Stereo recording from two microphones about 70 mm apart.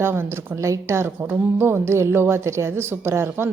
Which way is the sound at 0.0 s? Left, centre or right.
Right.